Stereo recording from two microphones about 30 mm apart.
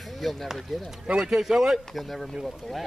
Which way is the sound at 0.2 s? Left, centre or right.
Centre.